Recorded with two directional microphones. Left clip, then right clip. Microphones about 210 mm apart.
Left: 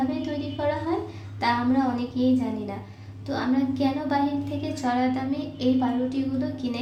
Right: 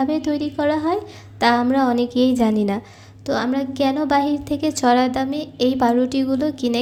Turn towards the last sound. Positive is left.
turn(degrees=-50)  # may be behind; listen again after turning